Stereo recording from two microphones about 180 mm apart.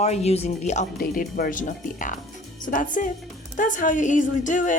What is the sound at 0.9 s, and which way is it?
Speech, 50° left (ahead or behind).